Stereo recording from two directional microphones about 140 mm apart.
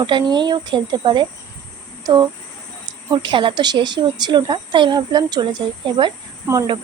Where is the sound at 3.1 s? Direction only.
35° right (ahead or behind).